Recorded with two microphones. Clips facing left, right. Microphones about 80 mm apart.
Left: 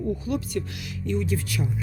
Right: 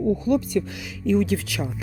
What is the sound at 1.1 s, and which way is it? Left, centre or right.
Speech, right.